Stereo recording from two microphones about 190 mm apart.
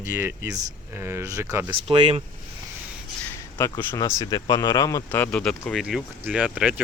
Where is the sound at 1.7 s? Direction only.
30° right (ahead or behind).